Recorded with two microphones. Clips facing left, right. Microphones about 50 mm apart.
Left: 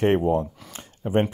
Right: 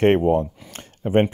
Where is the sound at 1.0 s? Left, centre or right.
Right.